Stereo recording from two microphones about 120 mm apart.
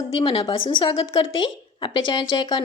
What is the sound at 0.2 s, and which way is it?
A woman's voice, 45° left (ahead or behind).